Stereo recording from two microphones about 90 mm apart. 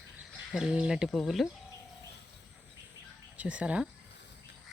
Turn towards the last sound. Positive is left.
turn(degrees=-15)  # may be behind; listen again after turning